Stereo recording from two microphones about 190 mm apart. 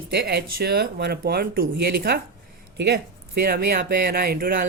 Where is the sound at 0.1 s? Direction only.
60° right (ahead or behind).